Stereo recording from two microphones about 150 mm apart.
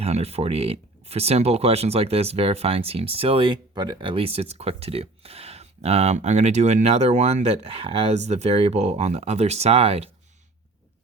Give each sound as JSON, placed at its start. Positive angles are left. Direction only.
{"t": 0.0, "sound": "speech", "side_deg": -45}